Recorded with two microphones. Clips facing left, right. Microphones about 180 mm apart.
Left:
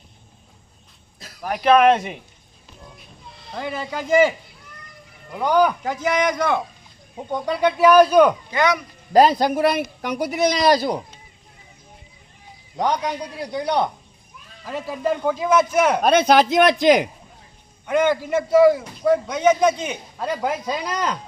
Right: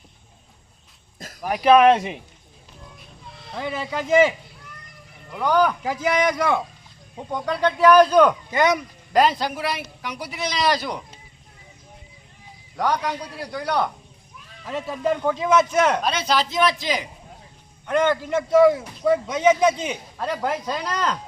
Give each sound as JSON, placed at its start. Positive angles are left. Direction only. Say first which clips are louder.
{"t": 1.4, "sound": "a man's voice", "louder": "right 1 dB", "side_deg": -5}
{"t": 3.2, "sound": "speech", "louder": "even", "side_deg": 0}
{"t": 5.3, "sound": "a man's voice", "louder": "left 2 dB", "side_deg": 15}
{"t": 5.8, "sound": "speech", "louder": "even", "side_deg": -5}
{"t": 7.2, "sound": "a man's voice", "louder": "left 2 dB", "side_deg": 10}
{"t": 8.4, "sound": "speech", "louder": "even", "side_deg": -45}
{"t": 9.1, "sound": "speech", "louder": "left 5 dB", "side_deg": 40}
{"t": 12.7, "sound": "a man's voice", "louder": "left 1 dB", "side_deg": 20}
{"t": 14.6, "sound": "a man's voice", "louder": "even", "side_deg": 0}
{"t": 16.0, "sound": "speech", "louder": "left 8 dB", "side_deg": 55}
{"t": 17.8, "sound": "a man's voice", "louder": "left 1 dB", "side_deg": 10}
{"t": 20.4, "sound": "a man's voice", "louder": "left 1 dB", "side_deg": 10}